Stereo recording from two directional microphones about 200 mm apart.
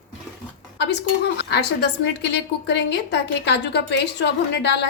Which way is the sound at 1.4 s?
55° left (ahead or behind).